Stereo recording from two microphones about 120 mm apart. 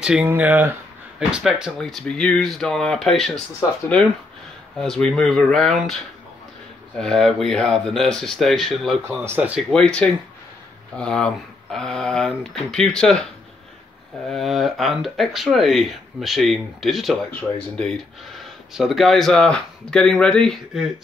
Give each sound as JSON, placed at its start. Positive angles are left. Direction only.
{"t": 0.0, "sound": "speech", "side_deg": -10}
{"t": 1.3, "sound": "speech", "side_deg": -5}
{"t": 4.7, "sound": "speech", "side_deg": 5}
{"t": 7.0, "sound": "speech", "side_deg": 5}
{"t": 9.1, "sound": "speech", "side_deg": -15}
{"t": 9.6, "sound": "speech", "side_deg": 5}
{"t": 14.3, "sound": "speech", "side_deg": 0}
{"t": 17.3, "sound": "speech", "side_deg": 10}